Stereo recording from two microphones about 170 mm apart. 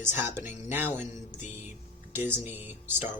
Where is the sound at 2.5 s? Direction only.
10° right (ahead or behind).